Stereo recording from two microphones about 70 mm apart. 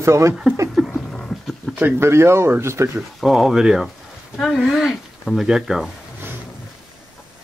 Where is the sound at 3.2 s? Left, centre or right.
Centre.